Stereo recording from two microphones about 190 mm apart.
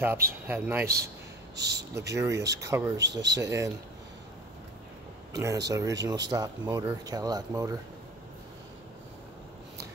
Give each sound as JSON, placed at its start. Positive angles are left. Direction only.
{"t": 0.0, "sound": "speech", "side_deg": -10}
{"t": 1.6, "sound": "speech", "side_deg": -60}
{"t": 2.1, "sound": "speech", "side_deg": -15}
{"t": 3.0, "sound": "speech", "side_deg": -65}
{"t": 3.3, "sound": "speech", "side_deg": -15}
{"t": 5.4, "sound": "speech", "side_deg": -20}